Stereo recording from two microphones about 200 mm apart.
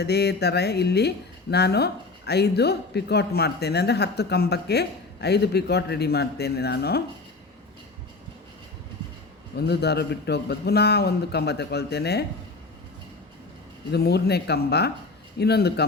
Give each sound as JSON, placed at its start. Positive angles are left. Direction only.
{"t": 0.0, "sound": "speech", "side_deg": 55}
{"t": 9.6, "sound": "speech", "side_deg": 55}
{"t": 13.9, "sound": "speech", "side_deg": 55}